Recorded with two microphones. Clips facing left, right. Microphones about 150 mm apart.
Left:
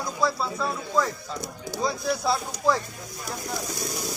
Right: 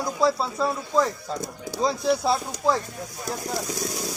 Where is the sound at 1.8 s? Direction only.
30° right (ahead or behind).